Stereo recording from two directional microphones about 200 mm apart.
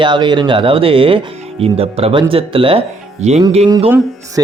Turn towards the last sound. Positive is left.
turn(degrees=-20)  # may be behind; listen again after turning